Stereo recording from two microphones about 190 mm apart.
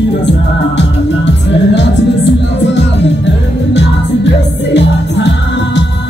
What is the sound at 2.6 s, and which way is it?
Music, 65° left (ahead or behind).